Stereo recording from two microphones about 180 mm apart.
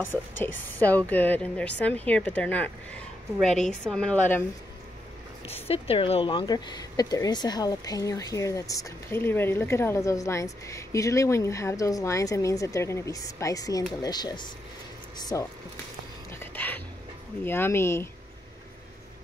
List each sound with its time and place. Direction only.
0.0 s a woman's voice: 10° left (ahead or behind)
5.7 s speech: 35° left (ahead or behind)
16.3 s music: 10° left (ahead or behind)
17.5 s a woman's voice: 10° left (ahead or behind)